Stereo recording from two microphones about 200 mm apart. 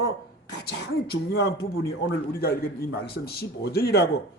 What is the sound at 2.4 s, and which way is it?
A man's voice, 50° left (ahead or behind).